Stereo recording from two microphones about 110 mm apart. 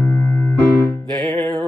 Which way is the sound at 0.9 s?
40° right (ahead or behind).